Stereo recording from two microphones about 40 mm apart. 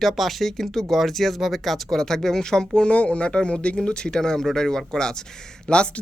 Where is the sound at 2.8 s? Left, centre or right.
Left.